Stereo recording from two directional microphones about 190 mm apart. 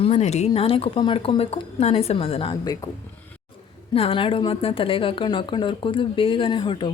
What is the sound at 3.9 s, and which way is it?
Speech, 30° left (ahead or behind).